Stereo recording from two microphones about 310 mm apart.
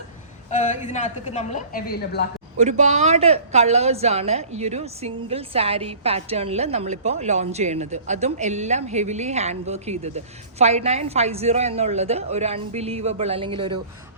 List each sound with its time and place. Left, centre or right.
0.5 s a woman's voice: left
2.6 s a woman's voice: right